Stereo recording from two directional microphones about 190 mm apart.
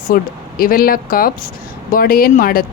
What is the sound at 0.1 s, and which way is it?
Speech, 45° left (ahead or behind).